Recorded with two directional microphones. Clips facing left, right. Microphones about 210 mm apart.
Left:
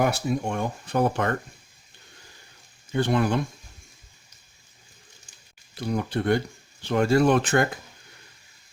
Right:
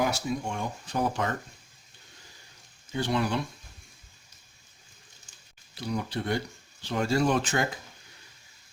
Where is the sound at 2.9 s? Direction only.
55° left (ahead or behind).